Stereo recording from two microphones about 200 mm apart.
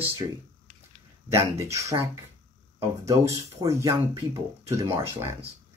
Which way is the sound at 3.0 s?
15° right (ahead or behind).